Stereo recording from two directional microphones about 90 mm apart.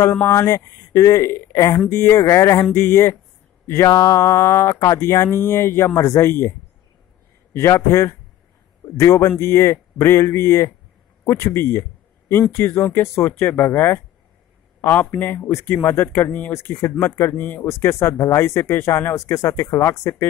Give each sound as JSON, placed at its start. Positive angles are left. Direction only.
{"t": 0.3, "sound": "speech", "side_deg": 30}
{"t": 3.9, "sound": "a sound", "side_deg": 45}
{"t": 4.2, "sound": "speech", "side_deg": 30}
{"t": 7.5, "sound": "speech", "side_deg": 30}
{"t": 17.6, "sound": "speech", "side_deg": 35}